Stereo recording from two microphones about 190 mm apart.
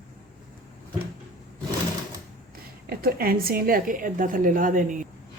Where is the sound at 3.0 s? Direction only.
50° right (ahead or behind).